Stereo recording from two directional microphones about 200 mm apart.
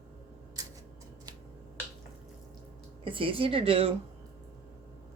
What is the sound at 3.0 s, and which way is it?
Speech, 25° right (ahead or behind).